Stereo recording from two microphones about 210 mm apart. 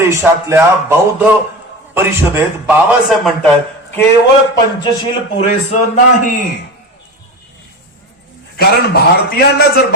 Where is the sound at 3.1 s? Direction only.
Centre (ahead or behind).